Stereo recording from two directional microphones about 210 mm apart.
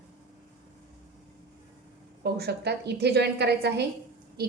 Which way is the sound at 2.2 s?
50° right (ahead or behind).